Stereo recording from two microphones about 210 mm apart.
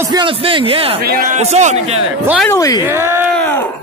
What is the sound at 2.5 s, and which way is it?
Speech, 15° left (ahead or behind).